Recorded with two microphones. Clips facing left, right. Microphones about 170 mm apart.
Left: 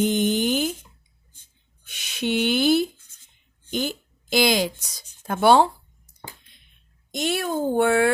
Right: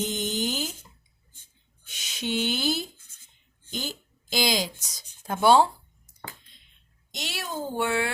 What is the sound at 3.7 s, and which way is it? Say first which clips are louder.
Speech: left 8 dB; 60° left (ahead or behind).